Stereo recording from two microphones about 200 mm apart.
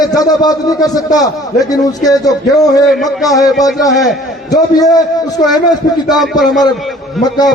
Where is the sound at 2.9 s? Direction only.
Centre (ahead or behind).